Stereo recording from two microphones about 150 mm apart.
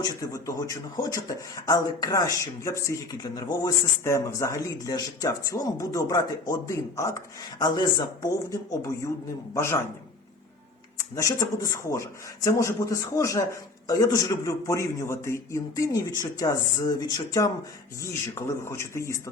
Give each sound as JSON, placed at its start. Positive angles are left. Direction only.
{"t": 0.0, "sound": "speech", "side_deg": 20}
{"t": 11.1, "sound": "speech", "side_deg": 20}